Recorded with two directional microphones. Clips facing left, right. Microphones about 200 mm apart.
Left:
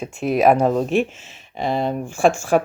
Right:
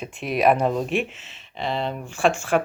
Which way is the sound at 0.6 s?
40° left (ahead or behind).